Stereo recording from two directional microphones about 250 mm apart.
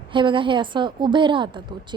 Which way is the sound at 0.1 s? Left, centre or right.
Centre.